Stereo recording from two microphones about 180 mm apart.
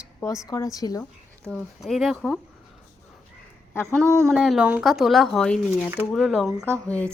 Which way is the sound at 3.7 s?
15° left (ahead or behind).